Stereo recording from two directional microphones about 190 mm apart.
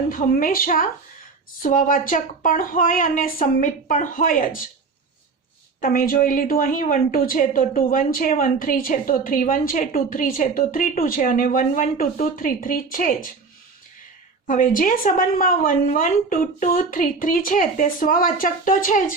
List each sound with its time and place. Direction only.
0.1 s a woman's voice: 45° left (ahead or behind)
5.8 s a woman's voice: 50° left (ahead or behind)
14.4 s a woman's voice: 45° left (ahead or behind)